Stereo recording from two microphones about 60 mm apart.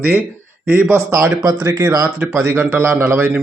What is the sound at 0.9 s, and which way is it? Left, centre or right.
Speech, right.